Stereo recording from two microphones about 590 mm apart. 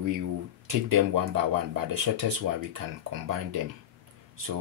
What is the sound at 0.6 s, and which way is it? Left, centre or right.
Speech, right.